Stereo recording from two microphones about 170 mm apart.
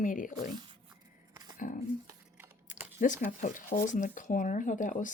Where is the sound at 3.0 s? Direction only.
50° left (ahead or behind).